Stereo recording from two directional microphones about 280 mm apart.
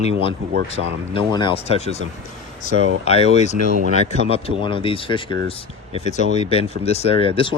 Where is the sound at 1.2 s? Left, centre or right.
Centre.